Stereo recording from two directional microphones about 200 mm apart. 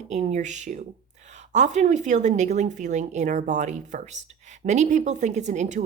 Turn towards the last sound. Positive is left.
turn(degrees=-35)  # may be behind; listen again after turning